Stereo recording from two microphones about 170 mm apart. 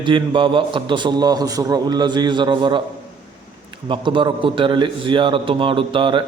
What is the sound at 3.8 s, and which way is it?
A man's voice, 30° right (ahead or behind).